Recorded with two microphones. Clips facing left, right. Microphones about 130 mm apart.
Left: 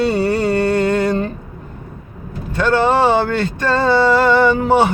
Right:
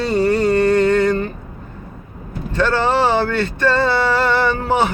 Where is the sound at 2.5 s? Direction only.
15° left (ahead or behind).